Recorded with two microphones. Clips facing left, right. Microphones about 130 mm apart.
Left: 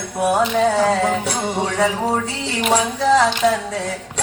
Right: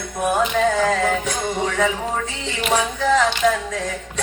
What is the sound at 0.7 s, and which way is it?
Music, 35° left (ahead or behind).